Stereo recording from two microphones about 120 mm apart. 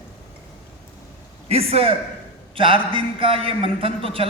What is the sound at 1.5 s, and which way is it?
A man's voice, 55° right (ahead or behind).